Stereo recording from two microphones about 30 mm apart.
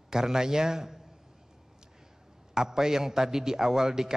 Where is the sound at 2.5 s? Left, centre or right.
Centre.